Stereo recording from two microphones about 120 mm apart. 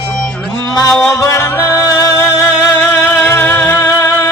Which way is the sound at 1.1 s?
25° left (ahead or behind).